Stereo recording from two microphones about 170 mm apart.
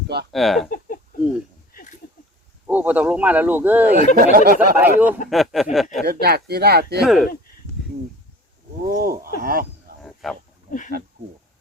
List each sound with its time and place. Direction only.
0.3 s speech: centre (ahead or behind)
2.6 s speech: 10° right (ahead or behind)
3.9 s speech: 55° right (ahead or behind)
4.8 s speech: 10° right (ahead or behind)
6.1 s speech: 65° right (ahead or behind)
7.0 s speech: centre (ahead or behind)
8.9 s a sound: 60° right (ahead or behind)
10.0 s a sound: centre (ahead or behind)
10.7 s a sound: 50° left (ahead or behind)